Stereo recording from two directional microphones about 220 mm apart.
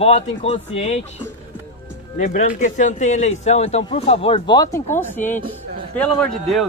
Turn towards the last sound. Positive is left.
turn(degrees=0)  # may be behind; listen again after turning